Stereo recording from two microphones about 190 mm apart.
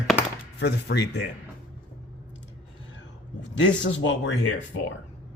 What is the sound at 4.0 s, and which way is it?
Speech, 70° left (ahead or behind).